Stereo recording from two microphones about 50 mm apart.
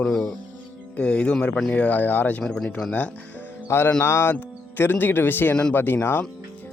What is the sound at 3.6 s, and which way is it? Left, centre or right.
Speech, left.